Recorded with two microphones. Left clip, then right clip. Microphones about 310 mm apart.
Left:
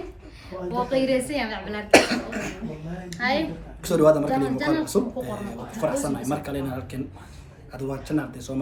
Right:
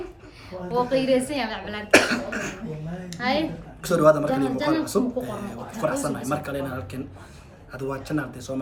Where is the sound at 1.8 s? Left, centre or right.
Centre.